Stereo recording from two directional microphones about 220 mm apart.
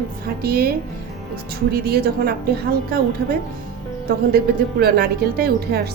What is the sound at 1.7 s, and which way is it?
A woman's voice, 45° right (ahead or behind).